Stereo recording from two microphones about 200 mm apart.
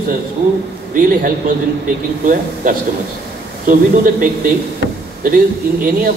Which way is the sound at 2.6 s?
45° right (ahead or behind).